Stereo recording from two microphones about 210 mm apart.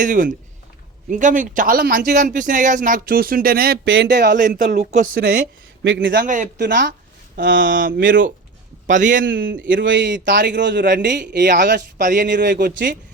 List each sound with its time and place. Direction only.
0.0 s a man's voice: 40° right (ahead or behind); by 4.4 s 55° right (ahead or behind)
4.4 s a man's voice: 40° right (ahead or behind)
5.8 s a man's voice: 60° right (ahead or behind)
6.1 s a man's voice: 40° right (ahead or behind)
6.6 s a man's voice: 55° right (ahead or behind)
7.7 s a man's voice: 40° right (ahead or behind)
7.9 s a man's voice: 60° right (ahead or behind)
8.9 s a man's voice: 35° right (ahead or behind)
9.6 s a man's voice: 60° right (ahead or behind)
11.9 s a man's voice: 40° right (ahead or behind)
12.3 s a man's voice: 55° right (ahead or behind)